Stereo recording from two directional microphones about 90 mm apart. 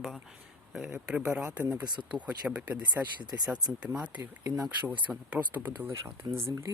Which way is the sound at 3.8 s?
15° right (ahead or behind).